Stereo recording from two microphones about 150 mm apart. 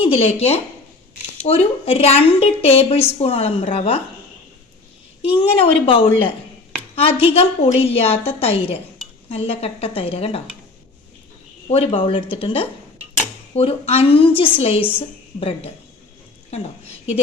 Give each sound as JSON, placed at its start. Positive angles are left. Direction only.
{"t": 0.0, "sound": "a woman's voice", "side_deg": 40}
{"t": 5.4, "sound": "a woman's voice", "side_deg": 40}
{"t": 11.7, "sound": "a woman's voice", "side_deg": 40}
{"t": 16.5, "sound": "a sound", "side_deg": 45}